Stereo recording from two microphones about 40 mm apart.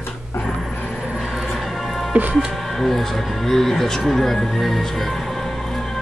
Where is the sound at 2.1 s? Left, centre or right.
Right.